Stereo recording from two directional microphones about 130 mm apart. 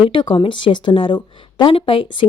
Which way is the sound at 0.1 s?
40° left (ahead or behind).